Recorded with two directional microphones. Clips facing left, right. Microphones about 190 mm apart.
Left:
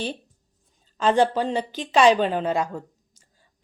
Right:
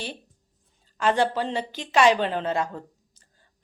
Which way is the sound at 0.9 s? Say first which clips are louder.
Left 3 dB; 20° left (ahead or behind).